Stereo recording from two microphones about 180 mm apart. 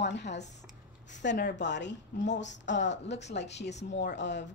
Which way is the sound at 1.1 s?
75° left (ahead or behind).